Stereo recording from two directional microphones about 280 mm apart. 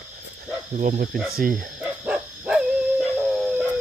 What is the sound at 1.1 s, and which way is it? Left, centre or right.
Speech, centre.